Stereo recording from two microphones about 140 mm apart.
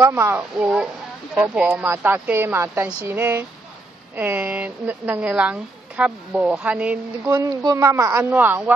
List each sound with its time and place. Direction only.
0.0 s speech: 20° right (ahead or behind)
0.4 s speech: 5° right (ahead or behind)
7.2 s speech: 30° right (ahead or behind); by 8.7 s 10° right (ahead or behind)